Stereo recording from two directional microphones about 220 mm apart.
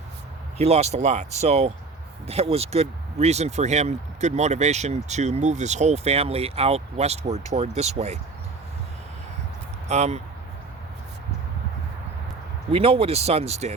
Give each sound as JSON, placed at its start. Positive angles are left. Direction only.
{"t": 0.6, "sound": "speech", "side_deg": -30}
{"t": 9.9, "sound": "speech", "side_deg": -30}
{"t": 12.7, "sound": "speech", "side_deg": -25}